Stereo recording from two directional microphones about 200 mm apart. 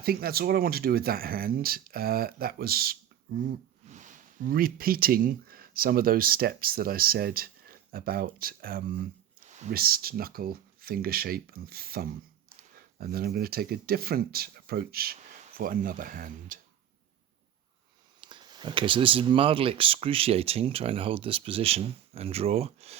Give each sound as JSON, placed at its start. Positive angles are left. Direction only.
{"t": 0.0, "sound": "speech", "side_deg": -50}
{"t": 3.8, "sound": "speech", "side_deg": -40}
{"t": 18.2, "sound": "speech", "side_deg": -25}